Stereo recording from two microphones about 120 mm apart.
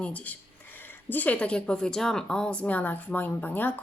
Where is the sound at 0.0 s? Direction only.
10° left (ahead or behind).